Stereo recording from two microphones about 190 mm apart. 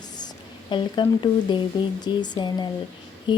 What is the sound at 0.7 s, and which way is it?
A woman's voice, 25° left (ahead or behind).